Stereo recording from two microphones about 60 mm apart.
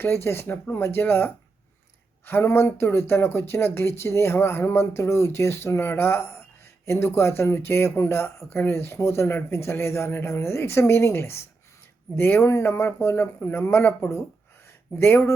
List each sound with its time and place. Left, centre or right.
0.0 s speech: left
0.4 s speech: left